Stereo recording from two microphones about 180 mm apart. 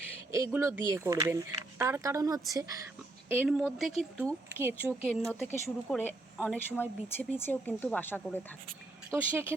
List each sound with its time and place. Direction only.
0.3 s speech: 15° right (ahead or behind)
3.2 s speech: 10° right (ahead or behind)
5.0 s speech: 5° left (ahead or behind)
9.0 s speech: 10° right (ahead or behind)